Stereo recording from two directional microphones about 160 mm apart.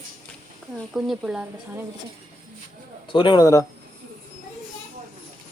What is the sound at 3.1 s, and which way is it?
Speech, 30° left (ahead or behind).